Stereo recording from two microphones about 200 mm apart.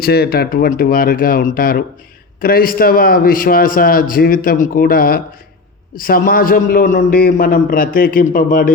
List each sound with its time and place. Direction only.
0.0 s a man's voice: 50° left (ahead or behind)